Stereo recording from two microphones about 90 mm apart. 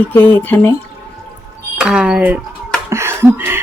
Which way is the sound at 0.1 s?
20° left (ahead or behind).